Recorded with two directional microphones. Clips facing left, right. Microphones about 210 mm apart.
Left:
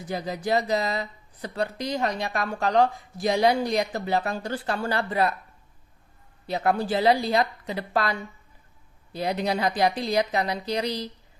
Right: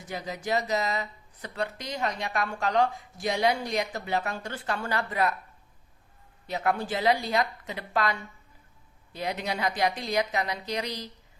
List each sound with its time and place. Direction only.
0.1 s speech: 35° left (ahead or behind)
6.5 s speech: 35° left (ahead or behind)
9.1 s speech: 35° left (ahead or behind)